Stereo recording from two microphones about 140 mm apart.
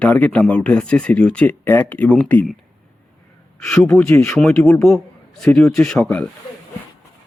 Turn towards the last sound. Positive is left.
turn(degrees=10)  # may be behind; listen again after turning